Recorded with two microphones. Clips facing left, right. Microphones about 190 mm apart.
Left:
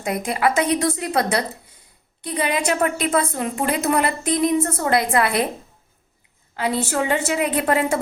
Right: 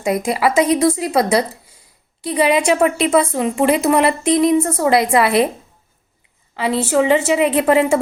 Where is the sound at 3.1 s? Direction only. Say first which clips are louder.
Right 6 dB; 10° right (ahead or behind).